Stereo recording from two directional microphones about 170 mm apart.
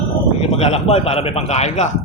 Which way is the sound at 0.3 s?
35° left (ahead or behind).